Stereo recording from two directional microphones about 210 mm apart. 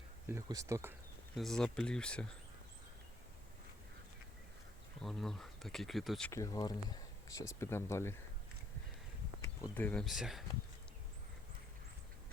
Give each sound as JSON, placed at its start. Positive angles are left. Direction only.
{"t": 0.3, "sound": "speech", "side_deg": -15}
{"t": 1.4, "sound": "speech", "side_deg": 0}
{"t": 5.0, "sound": "speech", "side_deg": 0}
{"t": 6.3, "sound": "speech", "side_deg": 15}
{"t": 9.4, "sound": "speech", "side_deg": 15}